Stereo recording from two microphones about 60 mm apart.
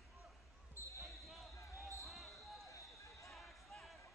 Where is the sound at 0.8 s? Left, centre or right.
Left.